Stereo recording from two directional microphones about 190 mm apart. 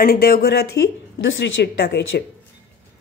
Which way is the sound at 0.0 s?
55° left (ahead or behind).